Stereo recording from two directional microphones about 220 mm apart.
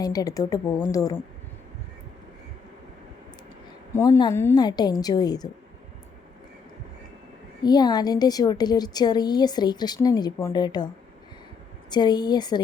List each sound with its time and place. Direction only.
0.0 s a woman's voice: 15° left (ahead or behind)
3.9 s a woman's voice: 15° left (ahead or behind)
7.6 s a woman's voice: 20° left (ahead or behind)
11.9 s a woman's voice: 20° left (ahead or behind)